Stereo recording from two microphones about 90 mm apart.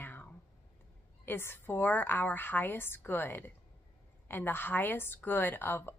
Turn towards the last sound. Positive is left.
turn(degrees=25)  # may be behind; listen again after turning